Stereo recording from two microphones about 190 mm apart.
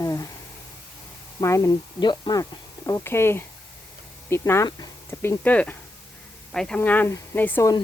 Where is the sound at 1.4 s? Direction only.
15° left (ahead or behind).